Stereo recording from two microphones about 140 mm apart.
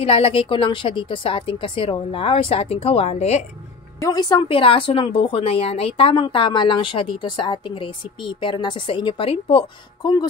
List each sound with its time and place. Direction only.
0.0 s speech: 40° left (ahead or behind)
4.0 s speech: 30° left (ahead or behind)